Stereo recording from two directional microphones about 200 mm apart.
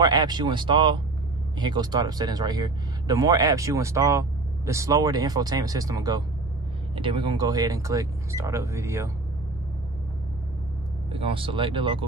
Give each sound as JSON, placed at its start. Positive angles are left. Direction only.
{"t": 0.0, "sound": "speech", "side_deg": -20}
{"t": 11.1, "sound": "speech", "side_deg": -30}